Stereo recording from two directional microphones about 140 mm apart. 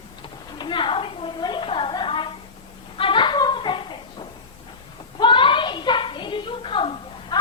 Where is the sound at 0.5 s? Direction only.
35° left (ahead or behind).